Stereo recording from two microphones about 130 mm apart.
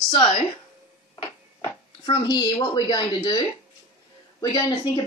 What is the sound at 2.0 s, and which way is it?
Speech, 35° left (ahead or behind).